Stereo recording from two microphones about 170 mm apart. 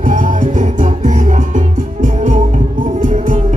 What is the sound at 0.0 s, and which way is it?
Music, 50° right (ahead or behind).